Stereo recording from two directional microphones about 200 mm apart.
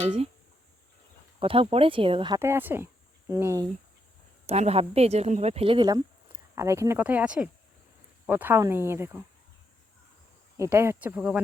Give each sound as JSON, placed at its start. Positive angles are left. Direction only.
{"t": 1.4, "sound": "speech", "side_deg": -25}
{"t": 4.4, "sound": "speech", "side_deg": -30}
{"t": 10.6, "sound": "speech", "side_deg": -15}